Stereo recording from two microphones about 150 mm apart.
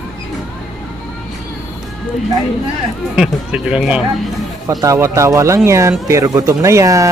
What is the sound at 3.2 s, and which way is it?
Speech, 5° right (ahead or behind).